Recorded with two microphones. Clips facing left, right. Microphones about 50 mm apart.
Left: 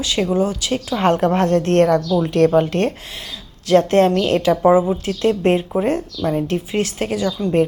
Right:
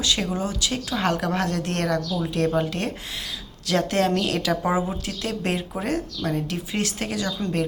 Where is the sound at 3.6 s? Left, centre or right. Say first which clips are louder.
Left 9 dB; left.